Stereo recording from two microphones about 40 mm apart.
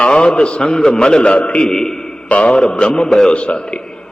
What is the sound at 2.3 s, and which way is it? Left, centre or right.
A man's voice, left.